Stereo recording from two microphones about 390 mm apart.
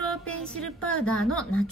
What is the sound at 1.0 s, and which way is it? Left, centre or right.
Speech, left.